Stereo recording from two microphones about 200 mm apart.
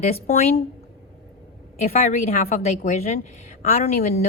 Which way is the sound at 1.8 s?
40° left (ahead or behind).